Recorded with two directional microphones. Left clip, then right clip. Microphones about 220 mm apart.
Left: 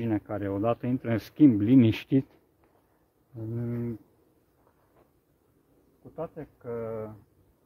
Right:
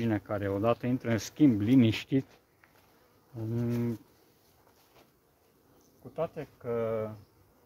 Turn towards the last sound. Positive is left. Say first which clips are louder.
# right 3 dB
turn(degrees=-45)  # may be behind; listen again after turning